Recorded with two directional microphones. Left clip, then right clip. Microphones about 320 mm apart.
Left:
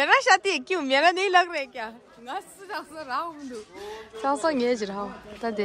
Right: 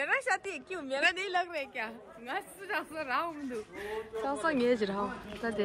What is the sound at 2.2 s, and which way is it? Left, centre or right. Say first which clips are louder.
Speech: left 3 dB; centre.